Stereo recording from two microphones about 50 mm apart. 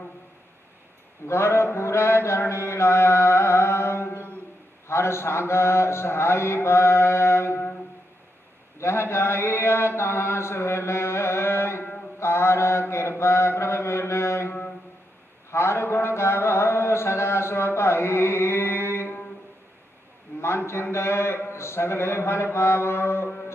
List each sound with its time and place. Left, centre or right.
1.2 s mantra: left
4.8 s a man's voice: left
8.7 s a sound: left
12.2 s mantra: left
15.5 s a sound: left
20.3 s a man's voice: left